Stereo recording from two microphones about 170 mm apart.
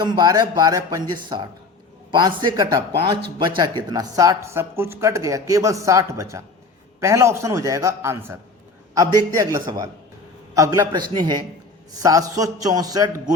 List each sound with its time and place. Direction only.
0.0 s a man's voice: 25° right (ahead or behind)